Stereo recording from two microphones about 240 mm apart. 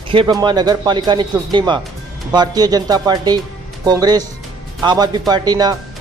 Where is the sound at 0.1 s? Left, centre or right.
Centre.